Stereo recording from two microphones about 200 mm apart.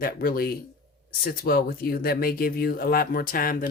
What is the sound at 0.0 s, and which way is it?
Speech, 50° left (ahead or behind).